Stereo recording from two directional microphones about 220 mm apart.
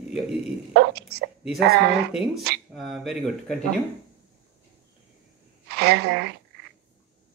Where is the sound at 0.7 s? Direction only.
45° right (ahead or behind).